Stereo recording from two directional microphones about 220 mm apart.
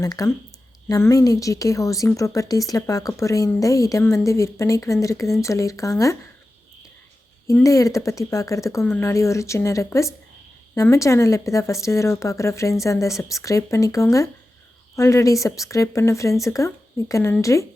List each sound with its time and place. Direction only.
0.0 s a woman's voice: 15° left (ahead or behind)
7.4 s a woman's voice: 15° left (ahead or behind)